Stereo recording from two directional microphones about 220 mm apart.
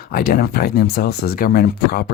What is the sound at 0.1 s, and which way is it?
Speech, 45° left (ahead or behind).